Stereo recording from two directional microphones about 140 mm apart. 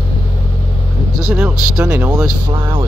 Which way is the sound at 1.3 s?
10° right (ahead or behind).